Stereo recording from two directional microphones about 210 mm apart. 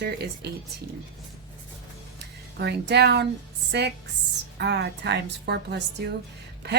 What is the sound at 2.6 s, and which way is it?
Speech, 50° right (ahead or behind).